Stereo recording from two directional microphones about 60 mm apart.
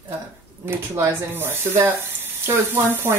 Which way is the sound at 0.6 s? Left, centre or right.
Right.